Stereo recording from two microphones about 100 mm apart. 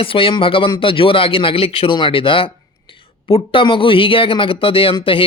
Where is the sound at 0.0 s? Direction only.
65° left (ahead or behind).